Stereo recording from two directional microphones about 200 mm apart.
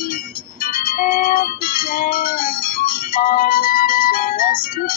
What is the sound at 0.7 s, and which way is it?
Music, 45° left (ahead or behind).